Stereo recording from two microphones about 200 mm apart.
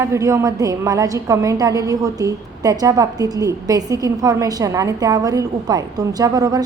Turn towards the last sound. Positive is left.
turn(degrees=-20)  # may be behind; listen again after turning